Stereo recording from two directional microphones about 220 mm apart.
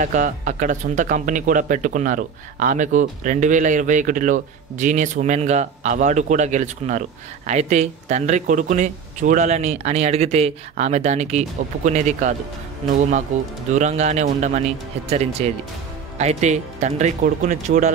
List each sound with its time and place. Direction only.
0.0 s speech: 35° right (ahead or behind)
13.7 s speech: 35° right (ahead or behind)
16.2 s speech: 30° right (ahead or behind)